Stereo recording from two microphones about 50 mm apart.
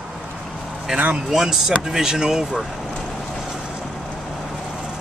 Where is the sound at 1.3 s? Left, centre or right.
Centre.